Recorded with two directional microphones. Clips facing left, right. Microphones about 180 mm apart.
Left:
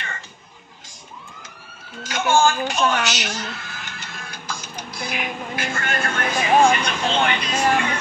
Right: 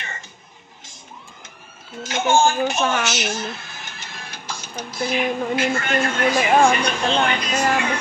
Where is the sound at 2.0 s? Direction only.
25° right (ahead or behind).